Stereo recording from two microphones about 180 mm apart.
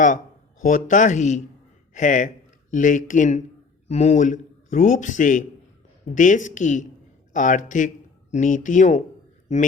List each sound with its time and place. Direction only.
0.6 s a man's voice: 45° left (ahead or behind)